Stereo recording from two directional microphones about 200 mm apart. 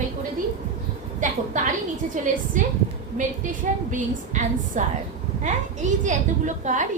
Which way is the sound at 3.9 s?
40° right (ahead or behind).